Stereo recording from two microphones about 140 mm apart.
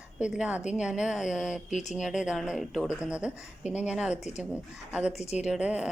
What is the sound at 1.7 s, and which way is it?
Speech, 55° left (ahead or behind).